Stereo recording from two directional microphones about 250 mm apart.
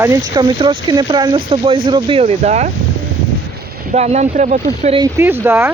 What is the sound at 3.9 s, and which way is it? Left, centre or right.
Speech, right.